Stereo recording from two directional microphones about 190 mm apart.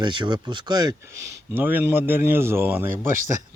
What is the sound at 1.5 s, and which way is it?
Speech, 10° right (ahead or behind).